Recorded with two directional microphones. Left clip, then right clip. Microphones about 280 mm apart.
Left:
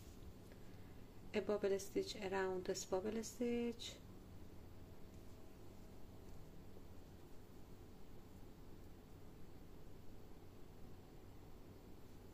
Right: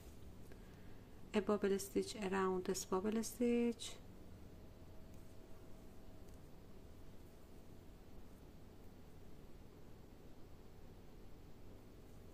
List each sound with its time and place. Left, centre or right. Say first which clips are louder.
1.3 s a woman's voice: right 2 dB; centre